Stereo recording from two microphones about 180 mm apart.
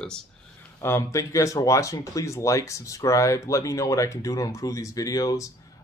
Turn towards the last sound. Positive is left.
turn(degrees=20)  # may be behind; listen again after turning